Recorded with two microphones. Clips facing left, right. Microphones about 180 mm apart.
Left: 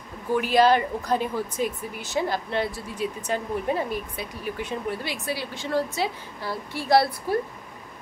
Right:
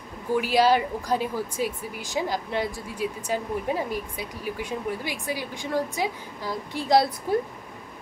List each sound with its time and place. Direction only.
0.3 s speech: 10° right (ahead or behind)